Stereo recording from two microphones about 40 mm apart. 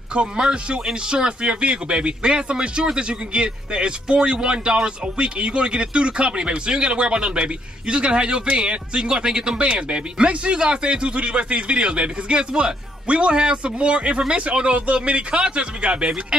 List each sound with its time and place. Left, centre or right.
0.1 s speech: right